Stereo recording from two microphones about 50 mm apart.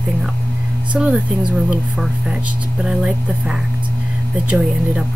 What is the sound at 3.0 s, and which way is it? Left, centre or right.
Speech, centre.